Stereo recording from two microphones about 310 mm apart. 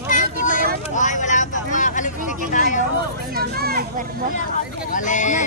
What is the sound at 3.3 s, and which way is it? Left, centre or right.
Speech, right.